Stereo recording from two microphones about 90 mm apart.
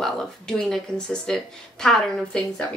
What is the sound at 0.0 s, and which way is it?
A woman's voice, 5° left (ahead or behind).